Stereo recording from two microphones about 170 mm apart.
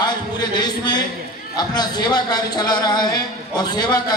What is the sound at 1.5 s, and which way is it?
A man's voice, 25° left (ahead or behind).